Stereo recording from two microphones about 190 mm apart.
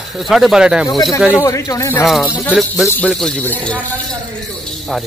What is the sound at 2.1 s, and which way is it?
A man's voice, 5° left (ahead or behind).